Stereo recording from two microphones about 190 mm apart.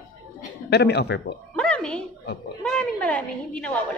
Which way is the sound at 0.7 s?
60° left (ahead or behind).